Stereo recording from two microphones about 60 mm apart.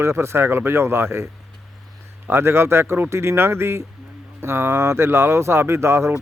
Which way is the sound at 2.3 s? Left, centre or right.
Right.